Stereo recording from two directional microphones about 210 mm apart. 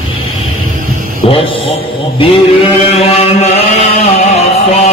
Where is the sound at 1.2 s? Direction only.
25° left (ahead or behind).